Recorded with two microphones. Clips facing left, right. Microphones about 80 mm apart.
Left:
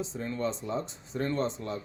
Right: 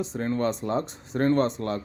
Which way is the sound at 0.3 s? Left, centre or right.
Right.